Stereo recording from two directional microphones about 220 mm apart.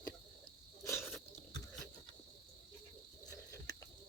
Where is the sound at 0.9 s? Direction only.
10° left (ahead or behind).